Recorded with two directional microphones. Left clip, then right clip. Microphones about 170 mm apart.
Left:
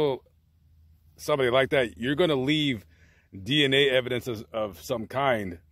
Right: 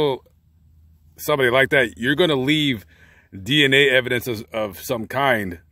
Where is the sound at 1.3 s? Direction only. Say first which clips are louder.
Right 6 dB; 15° right (ahead or behind).